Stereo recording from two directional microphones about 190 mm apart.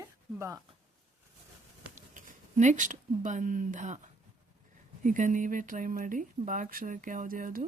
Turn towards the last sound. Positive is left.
turn(degrees=-45)  # may be behind; listen again after turning